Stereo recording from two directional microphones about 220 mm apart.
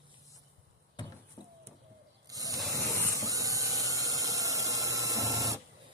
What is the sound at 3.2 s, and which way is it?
Dental drill, 15° right (ahead or behind).